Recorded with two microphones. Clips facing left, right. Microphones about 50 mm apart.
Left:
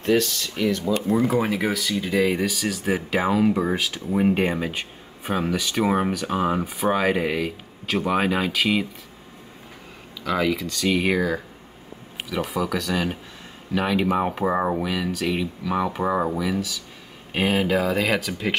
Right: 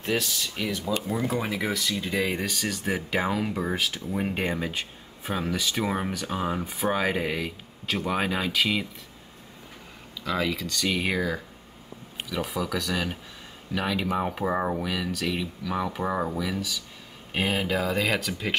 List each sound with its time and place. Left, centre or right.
0.0 s speech: centre
5.9 s speech: centre
10.2 s speech: centre
12.4 s speech: centre
15.2 s speech: centre